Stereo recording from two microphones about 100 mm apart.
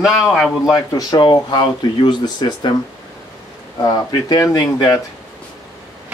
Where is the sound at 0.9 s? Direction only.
40° left (ahead or behind).